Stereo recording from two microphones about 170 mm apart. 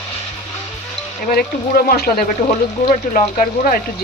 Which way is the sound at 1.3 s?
60° left (ahead or behind).